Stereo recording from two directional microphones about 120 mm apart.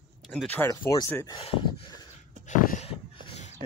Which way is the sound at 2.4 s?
90° left.